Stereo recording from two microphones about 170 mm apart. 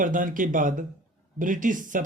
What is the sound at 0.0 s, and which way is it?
Speech, 50° right (ahead or behind).